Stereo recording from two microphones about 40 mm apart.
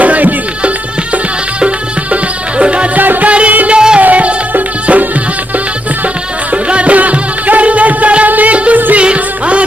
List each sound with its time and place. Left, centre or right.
0.0 s music: right
2.5 s music: right
3.0 s music: right
3.3 s music: right
6.5 s music: right